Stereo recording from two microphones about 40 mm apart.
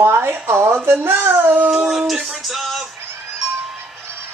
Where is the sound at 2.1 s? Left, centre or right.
Centre.